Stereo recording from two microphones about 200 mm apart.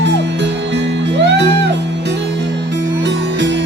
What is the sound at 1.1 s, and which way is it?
Music, 60° right (ahead or behind).